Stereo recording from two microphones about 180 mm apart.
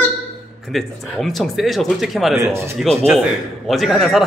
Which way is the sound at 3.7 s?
Centre (ahead or behind).